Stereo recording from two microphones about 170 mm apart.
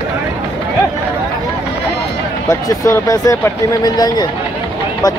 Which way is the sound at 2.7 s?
20° left (ahead or behind).